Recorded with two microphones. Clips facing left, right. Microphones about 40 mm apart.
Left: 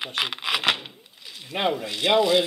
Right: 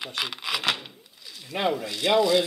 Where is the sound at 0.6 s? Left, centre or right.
Left.